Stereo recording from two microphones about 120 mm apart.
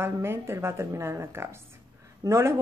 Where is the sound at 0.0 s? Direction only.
20° right (ahead or behind).